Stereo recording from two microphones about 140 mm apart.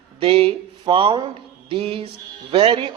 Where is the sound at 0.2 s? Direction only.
40° right (ahead or behind).